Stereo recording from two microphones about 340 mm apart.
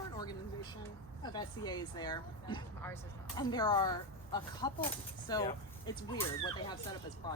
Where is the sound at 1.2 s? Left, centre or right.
Centre.